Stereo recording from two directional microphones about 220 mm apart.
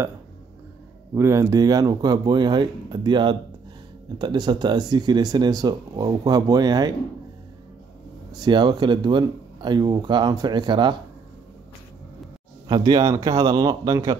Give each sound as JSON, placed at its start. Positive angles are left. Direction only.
{"t": 1.1, "sound": "speech", "side_deg": -10}
{"t": 8.3, "sound": "speech", "side_deg": -20}
{"t": 12.6, "sound": "speech", "side_deg": -20}